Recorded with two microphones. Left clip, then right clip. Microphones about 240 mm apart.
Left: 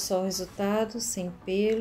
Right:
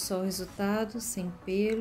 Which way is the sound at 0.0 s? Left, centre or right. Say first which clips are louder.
Left 5 dB; centre.